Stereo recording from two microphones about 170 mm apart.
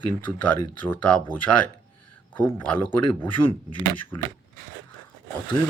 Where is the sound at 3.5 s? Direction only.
30° left (ahead or behind).